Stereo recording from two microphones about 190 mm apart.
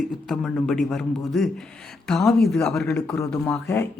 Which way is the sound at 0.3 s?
Centre (ahead or behind).